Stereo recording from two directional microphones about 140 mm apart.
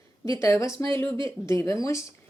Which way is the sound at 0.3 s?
20° left (ahead or behind).